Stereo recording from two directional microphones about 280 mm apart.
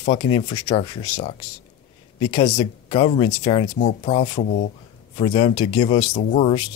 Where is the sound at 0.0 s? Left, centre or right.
Centre.